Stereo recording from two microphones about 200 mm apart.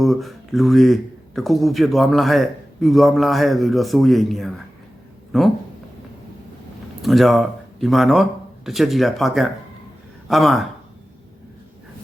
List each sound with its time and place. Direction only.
0.0 s a man's voice: centre (ahead or behind)
7.0 s a man's voice: centre (ahead or behind)